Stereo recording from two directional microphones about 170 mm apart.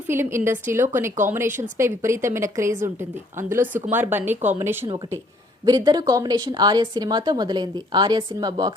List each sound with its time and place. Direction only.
0.1 s a woman's voice: 15° right (ahead or behind)